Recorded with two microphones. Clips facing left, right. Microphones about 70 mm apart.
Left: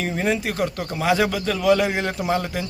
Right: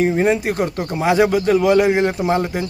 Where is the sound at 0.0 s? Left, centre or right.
Right.